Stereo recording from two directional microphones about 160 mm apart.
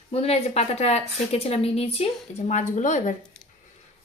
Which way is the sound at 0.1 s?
40° left (ahead or behind).